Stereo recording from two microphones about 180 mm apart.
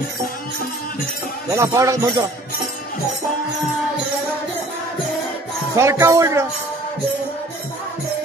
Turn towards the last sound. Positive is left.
turn(degrees=-15)  # may be behind; listen again after turning